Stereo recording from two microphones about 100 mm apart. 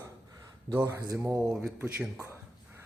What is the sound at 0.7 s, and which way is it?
Speech, 35° right (ahead or behind).